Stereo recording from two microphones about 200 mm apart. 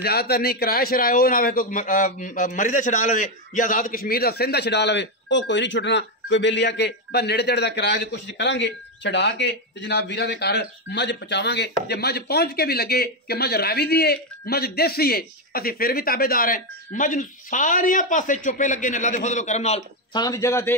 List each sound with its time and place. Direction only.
0.0 s a man's voice: 50° left (ahead or behind); by 19.8 s 35° left (ahead or behind)
20.1 s a man's voice: 20° left (ahead or behind)